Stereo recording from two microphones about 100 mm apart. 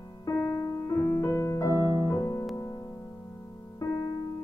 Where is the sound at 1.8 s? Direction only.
40° left (ahead or behind).